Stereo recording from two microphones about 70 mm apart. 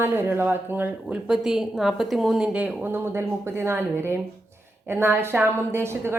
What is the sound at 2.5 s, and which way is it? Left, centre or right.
A woman's voice, right.